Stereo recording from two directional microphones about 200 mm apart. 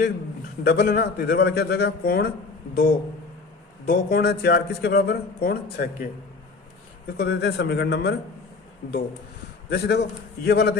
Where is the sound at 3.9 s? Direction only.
45° left (ahead or behind).